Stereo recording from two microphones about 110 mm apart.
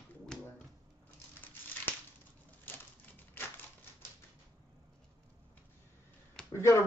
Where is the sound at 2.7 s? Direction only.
20° left (ahead or behind).